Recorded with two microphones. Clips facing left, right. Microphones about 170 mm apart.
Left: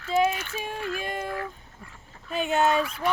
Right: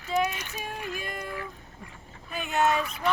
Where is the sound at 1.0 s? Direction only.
30° left (ahead or behind).